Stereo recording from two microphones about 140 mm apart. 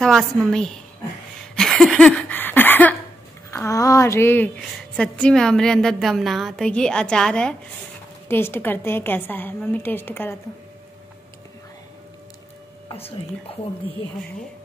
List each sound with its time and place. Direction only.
0.0 s a woman's voice: centre (ahead or behind)
1.5 s a sound: 5° left (ahead or behind)
3.4 s a woman's voice: 20° left (ahead or behind)
12.9 s speech: 45° left (ahead or behind)